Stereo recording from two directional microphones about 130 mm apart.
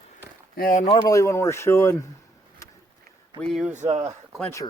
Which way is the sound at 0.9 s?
30° left (ahead or behind).